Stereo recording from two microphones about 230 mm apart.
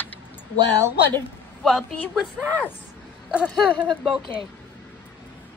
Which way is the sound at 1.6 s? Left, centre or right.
Centre.